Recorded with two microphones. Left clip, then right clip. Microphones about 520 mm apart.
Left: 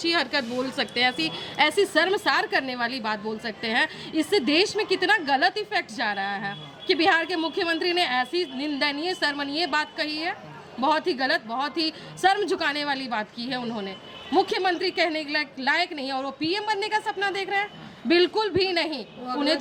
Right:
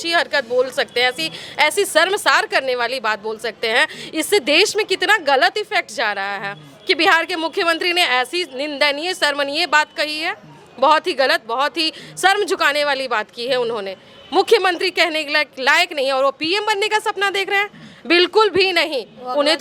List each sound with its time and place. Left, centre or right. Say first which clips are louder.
0.0 s a woman's voice: right 6 dB; right